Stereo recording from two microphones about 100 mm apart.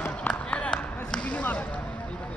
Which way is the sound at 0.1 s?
10° left (ahead or behind).